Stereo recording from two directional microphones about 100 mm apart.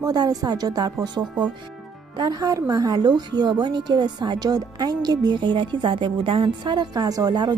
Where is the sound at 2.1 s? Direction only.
40° right (ahead or behind).